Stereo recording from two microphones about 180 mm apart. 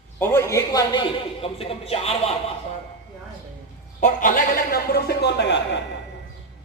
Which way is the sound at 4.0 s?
45° left (ahead or behind).